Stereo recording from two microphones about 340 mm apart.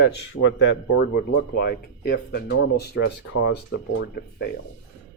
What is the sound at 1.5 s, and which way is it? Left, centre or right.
Speech, left.